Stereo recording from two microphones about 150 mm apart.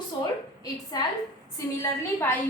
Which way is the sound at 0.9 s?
25° left (ahead or behind).